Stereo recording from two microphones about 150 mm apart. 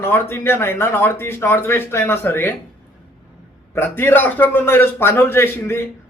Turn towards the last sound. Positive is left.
turn(degrees=15)  # may be behind; listen again after turning